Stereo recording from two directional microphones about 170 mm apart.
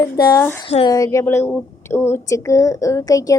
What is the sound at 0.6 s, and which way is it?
Speech, 35° left (ahead or behind).